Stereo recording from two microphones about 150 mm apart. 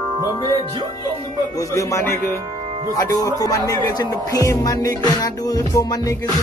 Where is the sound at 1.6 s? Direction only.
20° left (ahead or behind).